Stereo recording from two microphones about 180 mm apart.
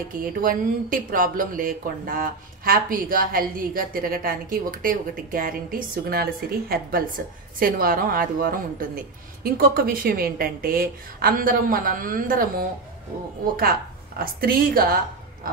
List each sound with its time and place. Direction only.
0.1 s a woman's voice: 50° right (ahead or behind)